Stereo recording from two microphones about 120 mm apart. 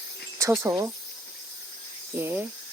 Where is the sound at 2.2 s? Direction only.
20° right (ahead or behind).